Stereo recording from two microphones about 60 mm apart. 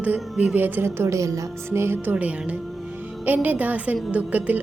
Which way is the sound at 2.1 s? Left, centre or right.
Right.